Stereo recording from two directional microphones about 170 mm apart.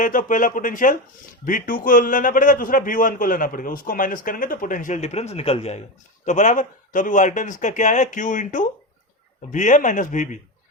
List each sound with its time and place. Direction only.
0.0 s a man's voice: 50° left (ahead or behind)